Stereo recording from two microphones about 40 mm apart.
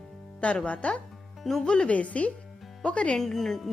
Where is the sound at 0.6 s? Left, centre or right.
Left.